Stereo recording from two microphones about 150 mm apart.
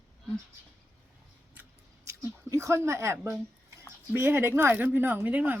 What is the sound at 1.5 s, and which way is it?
Chewing, 15° right (ahead or behind).